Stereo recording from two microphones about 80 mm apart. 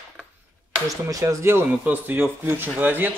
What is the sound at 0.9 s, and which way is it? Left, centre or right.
Speech, right.